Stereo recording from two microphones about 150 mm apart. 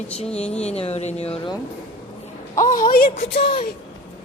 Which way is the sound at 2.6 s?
65° left (ahead or behind).